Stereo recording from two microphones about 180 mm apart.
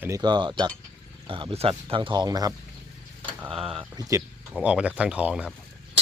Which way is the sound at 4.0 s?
15° right (ahead or behind).